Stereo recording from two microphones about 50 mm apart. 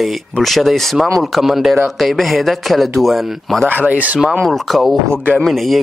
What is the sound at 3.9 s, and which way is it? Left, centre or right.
Speech, right.